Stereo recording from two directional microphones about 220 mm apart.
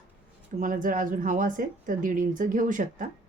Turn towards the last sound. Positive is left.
turn(degrees=-35)  # may be behind; listen again after turning